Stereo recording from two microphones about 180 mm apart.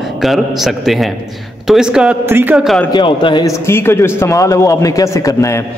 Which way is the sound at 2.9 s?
25° left (ahead or behind).